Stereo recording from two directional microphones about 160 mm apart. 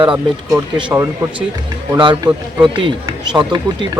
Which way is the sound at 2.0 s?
30° right (ahead or behind).